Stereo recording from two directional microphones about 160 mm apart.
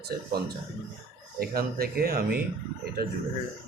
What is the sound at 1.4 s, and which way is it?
A man's voice, 70° right (ahead or behind).